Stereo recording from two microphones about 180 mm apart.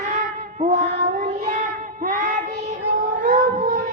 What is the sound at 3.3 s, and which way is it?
Cat, 50° right (ahead or behind).